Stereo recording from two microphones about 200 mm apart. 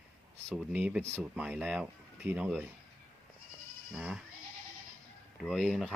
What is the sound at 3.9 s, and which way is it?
Speech, 5° right (ahead or behind).